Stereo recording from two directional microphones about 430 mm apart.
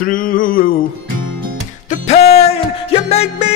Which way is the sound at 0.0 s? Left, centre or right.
Centre.